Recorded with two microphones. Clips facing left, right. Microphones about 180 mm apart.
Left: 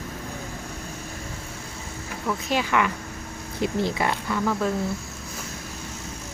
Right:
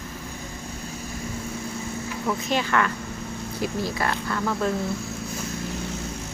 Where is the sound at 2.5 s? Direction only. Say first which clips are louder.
Left 1 dB; 10° left (ahead or behind).